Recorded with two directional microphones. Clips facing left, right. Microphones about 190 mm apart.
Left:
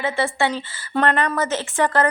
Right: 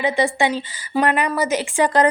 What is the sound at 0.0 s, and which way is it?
A woman's voice, 15° right (ahead or behind).